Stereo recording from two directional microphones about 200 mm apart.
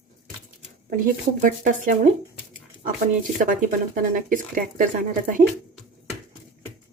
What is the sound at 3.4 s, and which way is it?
Speech, 40° right (ahead or behind).